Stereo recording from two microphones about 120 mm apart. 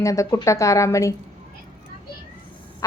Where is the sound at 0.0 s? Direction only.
25° left (ahead or behind).